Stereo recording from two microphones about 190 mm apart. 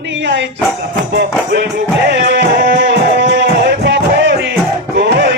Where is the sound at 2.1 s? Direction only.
65° right (ahead or behind).